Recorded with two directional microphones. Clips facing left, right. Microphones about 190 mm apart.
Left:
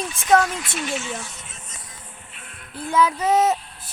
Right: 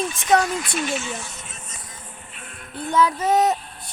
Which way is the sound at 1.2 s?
45° right (ahead or behind).